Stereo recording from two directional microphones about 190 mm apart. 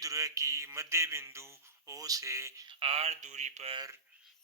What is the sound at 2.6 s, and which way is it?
Speech, 30° right (ahead or behind).